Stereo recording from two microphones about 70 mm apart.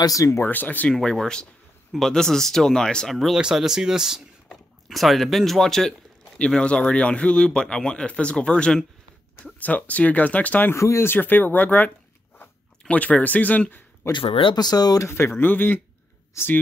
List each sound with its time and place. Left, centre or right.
0.0 s speech: left
0.4 s speech: left
0.8 s speech: centre
3.3 s speech: centre; by 10.7 s left
10.7 s speech: left
11.1 s speech: left
14.1 s speech: left
15.0 s speech: left
15.3 s speech: left